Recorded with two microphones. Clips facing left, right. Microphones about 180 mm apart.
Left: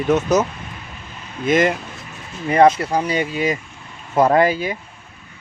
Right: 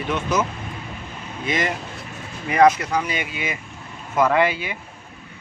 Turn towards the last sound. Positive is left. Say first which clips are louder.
# left 4 dB
turn(degrees=40)  # may be behind; listen again after turning